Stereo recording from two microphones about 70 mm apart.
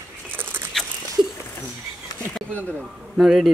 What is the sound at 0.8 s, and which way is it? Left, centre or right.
Dog, centre.